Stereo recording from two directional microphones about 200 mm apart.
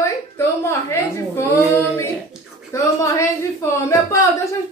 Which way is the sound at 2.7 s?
15° left (ahead or behind).